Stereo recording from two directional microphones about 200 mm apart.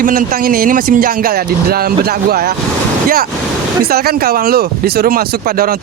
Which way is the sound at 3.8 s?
50° right (ahead or behind).